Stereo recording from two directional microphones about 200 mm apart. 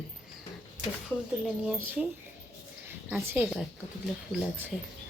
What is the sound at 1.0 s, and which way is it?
Speech, centre (ahead or behind).